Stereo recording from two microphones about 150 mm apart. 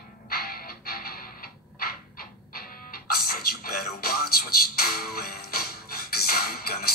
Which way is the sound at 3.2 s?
85° left.